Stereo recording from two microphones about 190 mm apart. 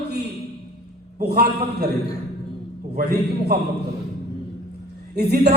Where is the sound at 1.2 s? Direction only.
55° right (ahead or behind).